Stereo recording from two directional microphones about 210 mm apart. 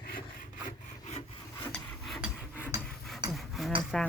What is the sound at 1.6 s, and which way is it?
Filing, centre (ahead or behind).